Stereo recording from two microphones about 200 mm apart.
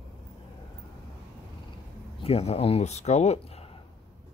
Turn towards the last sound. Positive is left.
turn(degrees=30)  # may be behind; listen again after turning